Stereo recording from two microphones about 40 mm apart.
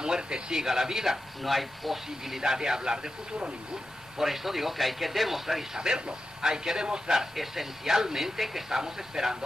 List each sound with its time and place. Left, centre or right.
0.0 s speech: centre
4.2 s a man's voice: centre
5.8 s speech: centre
7.2 s speech: centre